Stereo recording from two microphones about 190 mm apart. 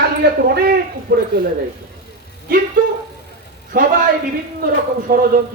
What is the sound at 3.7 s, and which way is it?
Speech, 50° right (ahead or behind).